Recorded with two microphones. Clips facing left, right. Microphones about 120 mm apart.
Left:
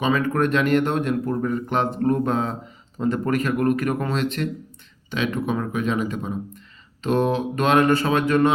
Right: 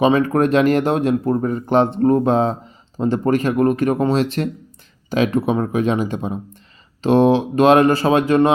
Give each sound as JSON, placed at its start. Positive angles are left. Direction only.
{"t": 0.0, "sound": "speech", "side_deg": -35}